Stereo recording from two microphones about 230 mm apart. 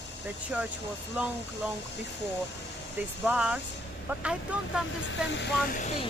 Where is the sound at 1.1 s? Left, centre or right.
Centre.